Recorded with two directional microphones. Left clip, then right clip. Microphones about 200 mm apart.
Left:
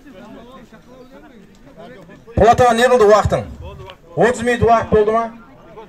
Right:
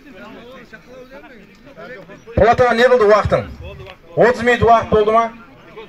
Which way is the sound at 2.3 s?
15° left (ahead or behind).